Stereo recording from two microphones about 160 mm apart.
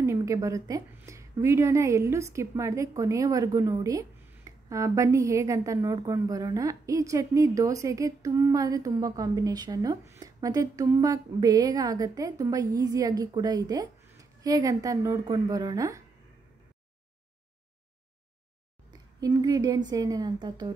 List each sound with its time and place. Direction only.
0.0 s a woman's voice: 20° right (ahead or behind)
18.9 s a sound: 25° right (ahead or behind)
19.9 s a woman's voice: 25° right (ahead or behind)